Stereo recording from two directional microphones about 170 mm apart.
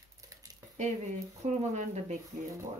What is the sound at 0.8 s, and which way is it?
Speech, 45° right (ahead or behind).